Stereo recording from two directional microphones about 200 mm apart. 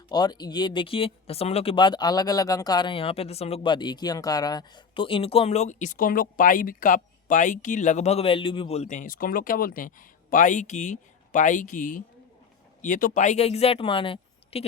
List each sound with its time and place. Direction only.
0.1 s speech: 20° left (ahead or behind)